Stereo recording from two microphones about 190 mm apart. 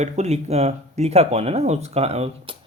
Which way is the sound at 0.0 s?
35° right (ahead or behind).